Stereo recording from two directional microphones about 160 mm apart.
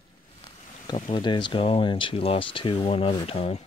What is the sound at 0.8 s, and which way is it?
Speech, 30° left (ahead or behind).